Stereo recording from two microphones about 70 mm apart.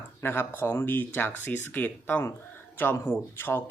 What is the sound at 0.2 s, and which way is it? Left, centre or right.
Speech, left.